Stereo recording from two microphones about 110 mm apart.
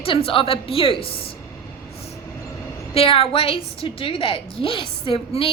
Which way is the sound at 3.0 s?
60° left (ahead or behind).